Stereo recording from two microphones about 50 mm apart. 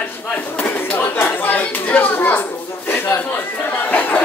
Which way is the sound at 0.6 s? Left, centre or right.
Left.